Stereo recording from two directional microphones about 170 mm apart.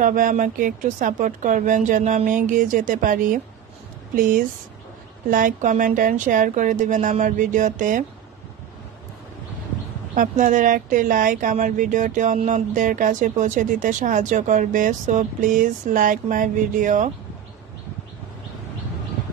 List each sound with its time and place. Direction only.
0.0 s speech: 50° right (ahead or behind)
10.1 s speech: 50° right (ahead or behind)